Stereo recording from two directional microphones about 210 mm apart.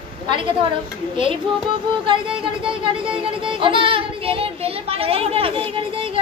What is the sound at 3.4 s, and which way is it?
Speech, 25° right (ahead or behind).